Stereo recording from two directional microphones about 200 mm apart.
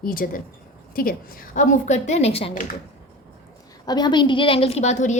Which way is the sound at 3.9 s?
20° left (ahead or behind).